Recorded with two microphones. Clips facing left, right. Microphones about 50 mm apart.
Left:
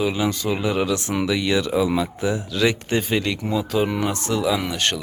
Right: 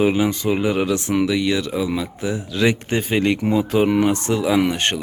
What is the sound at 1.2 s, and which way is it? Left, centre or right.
Speech, centre.